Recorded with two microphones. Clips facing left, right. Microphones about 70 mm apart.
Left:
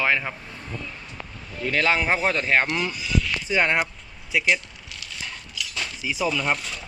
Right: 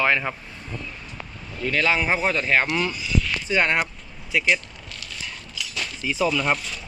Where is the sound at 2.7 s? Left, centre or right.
Centre.